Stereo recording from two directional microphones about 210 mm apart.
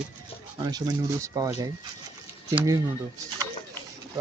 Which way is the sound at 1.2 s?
15° right (ahead or behind).